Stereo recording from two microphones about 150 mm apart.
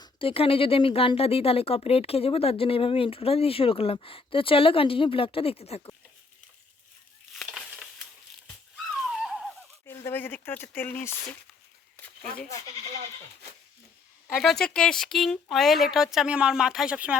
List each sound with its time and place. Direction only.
0.0 s speech: 35° left (ahead or behind)
7.4 s crushing: 5° right (ahead or behind)
9.0 s a sound: centre (ahead or behind)
9.8 s speech: 15° left (ahead or behind)
14.3 s speech: 5° left (ahead or behind)